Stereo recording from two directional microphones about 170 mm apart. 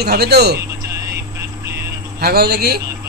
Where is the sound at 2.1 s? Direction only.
65° right (ahead or behind).